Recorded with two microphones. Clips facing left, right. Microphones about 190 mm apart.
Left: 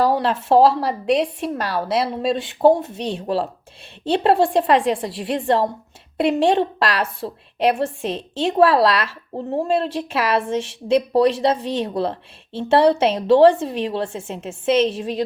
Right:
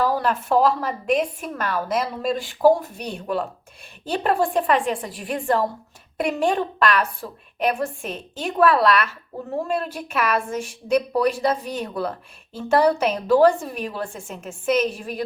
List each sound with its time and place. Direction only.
0.0 s a woman's voice: 30° left (ahead or behind)